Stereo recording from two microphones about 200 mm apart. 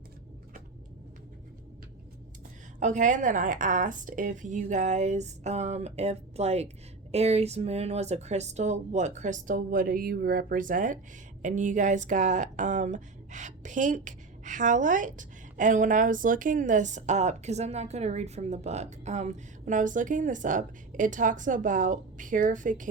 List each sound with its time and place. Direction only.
2.8 s speech: 40° right (ahead or behind)